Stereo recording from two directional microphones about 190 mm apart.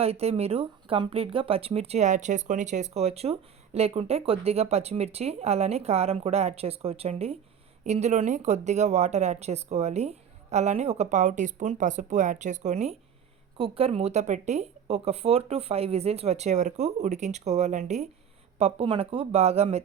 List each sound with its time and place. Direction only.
0.0 s speech: 30° right (ahead or behind)